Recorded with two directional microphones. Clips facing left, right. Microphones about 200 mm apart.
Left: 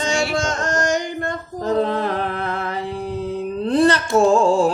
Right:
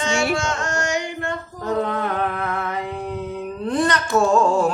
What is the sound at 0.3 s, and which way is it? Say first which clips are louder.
Singing: left 3 dB; 35° left (ahead or behind).